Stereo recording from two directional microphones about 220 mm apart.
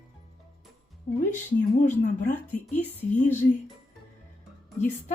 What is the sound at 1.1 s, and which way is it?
A woman's voice, 35° left (ahead or behind).